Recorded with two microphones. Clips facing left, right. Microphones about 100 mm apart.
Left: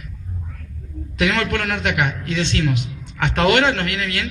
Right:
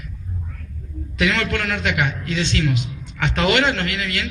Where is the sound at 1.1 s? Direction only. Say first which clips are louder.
Left 1 dB; 40° left (ahead or behind).